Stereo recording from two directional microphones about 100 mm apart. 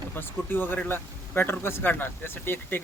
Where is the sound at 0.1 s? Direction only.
20° left (ahead or behind).